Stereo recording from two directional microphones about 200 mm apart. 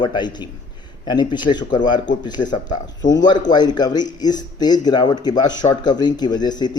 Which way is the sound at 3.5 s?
20° left (ahead or behind).